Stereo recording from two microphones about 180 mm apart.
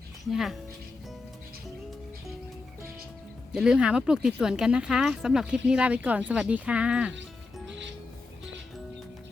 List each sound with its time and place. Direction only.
0.3 s speech: centre (ahead or behind)
3.5 s speech: 5° right (ahead or behind)